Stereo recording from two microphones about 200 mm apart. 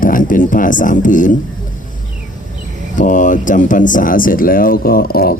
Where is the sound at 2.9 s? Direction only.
40° left (ahead or behind).